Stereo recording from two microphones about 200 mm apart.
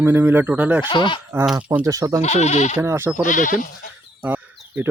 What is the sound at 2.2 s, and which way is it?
Speech, 35° left (ahead or behind).